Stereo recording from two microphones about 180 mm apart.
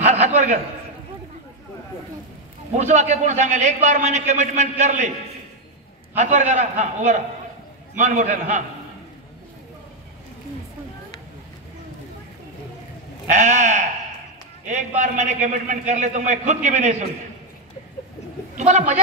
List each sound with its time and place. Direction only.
0.0 s a sound: 40° right (ahead or behind)
2.7 s a man's voice: 40° right (ahead or behind)
6.1 s a man's voice: 40° right (ahead or behind)
13.3 s a man's voice: 40° right (ahead or behind)
18.6 s a man's voice: 40° right (ahead or behind)